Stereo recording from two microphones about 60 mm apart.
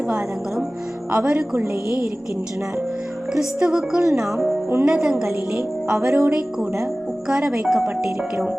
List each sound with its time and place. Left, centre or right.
1.1 s a woman's voice: centre
3.3 s a woman's voice: centre